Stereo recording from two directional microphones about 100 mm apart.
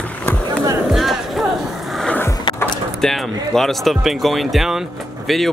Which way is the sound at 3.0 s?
5° left (ahead or behind).